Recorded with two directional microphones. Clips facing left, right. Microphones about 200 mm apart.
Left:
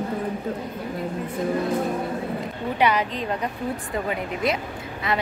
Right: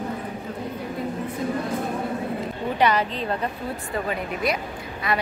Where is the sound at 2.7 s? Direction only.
10° left (ahead or behind).